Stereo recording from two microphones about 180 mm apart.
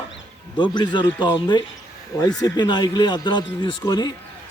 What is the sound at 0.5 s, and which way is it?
Speech, 25° left (ahead or behind).